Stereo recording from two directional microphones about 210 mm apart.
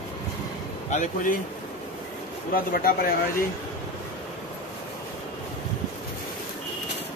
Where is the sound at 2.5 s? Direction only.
45° left (ahead or behind).